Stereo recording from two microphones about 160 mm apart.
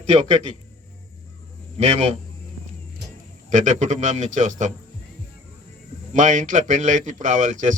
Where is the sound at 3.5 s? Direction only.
50° right (ahead or behind).